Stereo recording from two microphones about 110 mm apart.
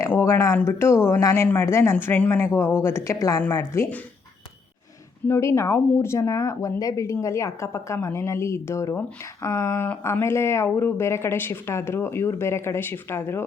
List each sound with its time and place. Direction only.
0.1 s speech: 25° left (ahead or behind)
5.2 s speech: 25° left (ahead or behind)